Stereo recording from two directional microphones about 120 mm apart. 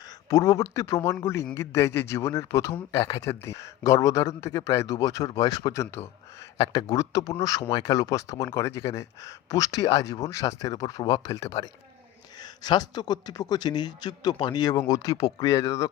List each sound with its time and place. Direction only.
0.3 s speech: 25° left (ahead or behind)
14.8 s speech: 25° left (ahead or behind)